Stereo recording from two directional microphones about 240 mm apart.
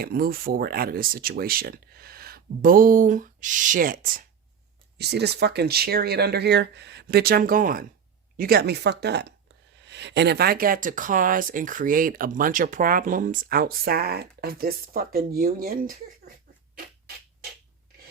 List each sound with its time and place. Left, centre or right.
0.0 s speech: right